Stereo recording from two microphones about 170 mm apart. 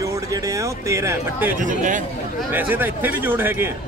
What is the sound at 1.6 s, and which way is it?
Speech, 50° right (ahead or behind).